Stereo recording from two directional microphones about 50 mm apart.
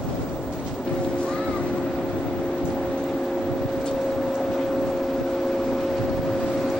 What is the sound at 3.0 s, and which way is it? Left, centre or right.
Vehicle, centre.